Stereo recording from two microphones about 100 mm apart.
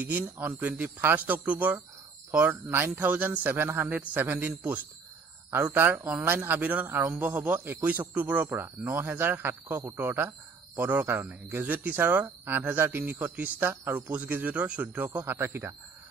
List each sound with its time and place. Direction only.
0.0 s a man's voice: 20° right (ahead or behind)